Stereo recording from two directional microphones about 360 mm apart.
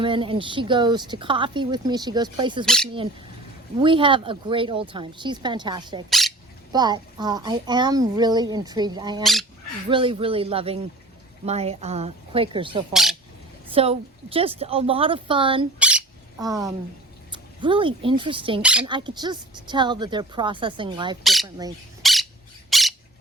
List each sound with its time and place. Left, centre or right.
0.0 s speech: centre
2.6 s speech: centre
3.8 s speech: centre
6.1 s a sound: centre
6.7 s speech: centre
9.2 s speech: centre
9.9 s speech: centre
12.9 s speech: centre
13.7 s speech: centre
15.8 s a sound: centre
17.3 s speech: centre
18.6 s speech: centre
22.0 s squawk: centre
22.7 s a sound: centre